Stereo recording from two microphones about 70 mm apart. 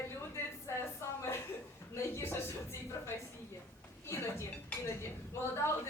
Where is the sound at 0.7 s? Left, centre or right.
Left.